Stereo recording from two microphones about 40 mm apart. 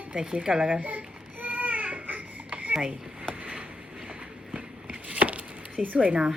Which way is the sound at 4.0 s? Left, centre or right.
Right.